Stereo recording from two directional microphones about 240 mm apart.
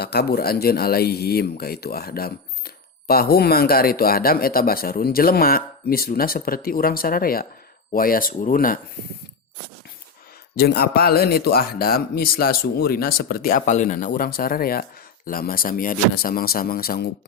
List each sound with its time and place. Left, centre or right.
0.0 s speech: left
10.6 s speech: left